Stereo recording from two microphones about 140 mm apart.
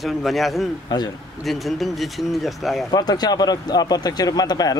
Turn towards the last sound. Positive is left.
turn(degrees=30)  # may be behind; listen again after turning